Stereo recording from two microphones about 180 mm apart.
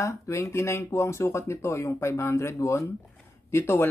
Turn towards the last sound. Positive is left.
turn(degrees=15)  # may be behind; listen again after turning